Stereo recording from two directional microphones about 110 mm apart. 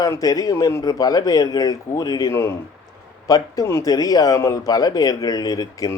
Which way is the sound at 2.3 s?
25° left (ahead or behind).